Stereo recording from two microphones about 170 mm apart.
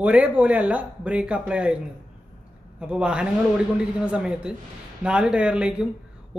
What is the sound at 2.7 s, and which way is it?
A man's voice, 5° right (ahead or behind).